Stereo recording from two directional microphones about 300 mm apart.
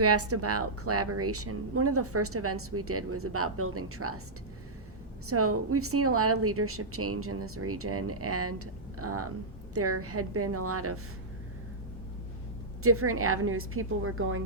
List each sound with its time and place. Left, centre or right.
0.0 s a woman's voice: right
5.2 s a woman's voice: right
12.8 s a woman's voice: right